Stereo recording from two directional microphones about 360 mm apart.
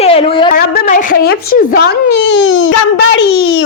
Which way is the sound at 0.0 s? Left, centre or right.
Centre.